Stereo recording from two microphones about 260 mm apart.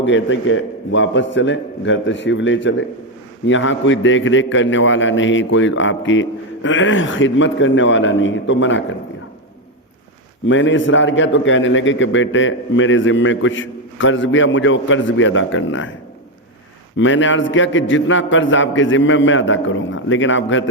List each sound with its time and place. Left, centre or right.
0.0 s a man's voice: left
10.4 s a man's voice: left
17.0 s a man's voice: left